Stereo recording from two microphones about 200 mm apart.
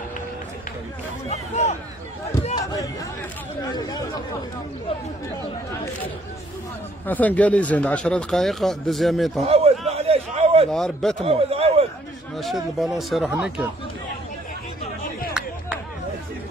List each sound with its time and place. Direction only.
1.3 s speech: 35° left (ahead or behind)
2.6 s speech: 15° left (ahead or behind)
7.1 s speech: 10° left (ahead or behind)
9.4 s a sound: 30° right (ahead or behind)
10.7 s speech: centre (ahead or behind)
11.2 s a sound: 30° right (ahead or behind)
12.7 s speech: centre (ahead or behind)